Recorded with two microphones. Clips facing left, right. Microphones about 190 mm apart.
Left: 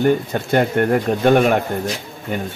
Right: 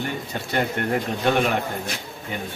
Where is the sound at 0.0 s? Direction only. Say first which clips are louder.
Left 12 dB; 50° left (ahead or behind).